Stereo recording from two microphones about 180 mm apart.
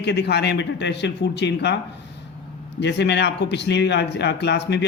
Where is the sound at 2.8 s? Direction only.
75° left (ahead or behind).